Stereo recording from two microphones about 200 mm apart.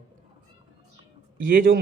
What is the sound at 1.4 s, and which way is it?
Speech, 45° right (ahead or behind).